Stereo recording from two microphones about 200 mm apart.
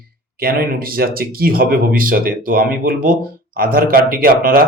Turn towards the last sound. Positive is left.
turn(degrees=-45)  # may be behind; listen again after turning